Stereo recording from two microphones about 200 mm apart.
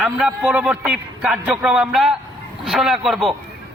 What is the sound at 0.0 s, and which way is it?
A man's voice, 5° right (ahead or behind).